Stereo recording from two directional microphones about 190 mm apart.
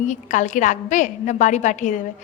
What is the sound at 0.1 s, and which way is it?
A woman's voice, 40° left (ahead or behind).